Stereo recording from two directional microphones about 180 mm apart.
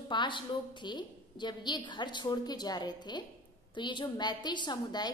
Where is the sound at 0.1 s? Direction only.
25° left (ahead or behind).